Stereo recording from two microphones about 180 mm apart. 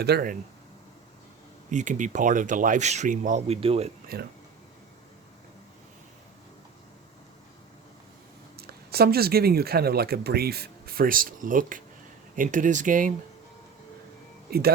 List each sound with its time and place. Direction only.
0.0 s speech: 60° right (ahead or behind)
1.7 s speech: 45° right (ahead or behind)
8.5 s speech: 60° right (ahead or behind)
14.5 s speech: 60° right (ahead or behind)